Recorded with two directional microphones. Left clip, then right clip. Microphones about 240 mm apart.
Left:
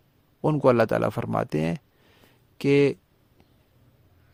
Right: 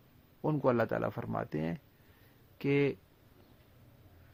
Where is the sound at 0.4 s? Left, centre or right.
Left.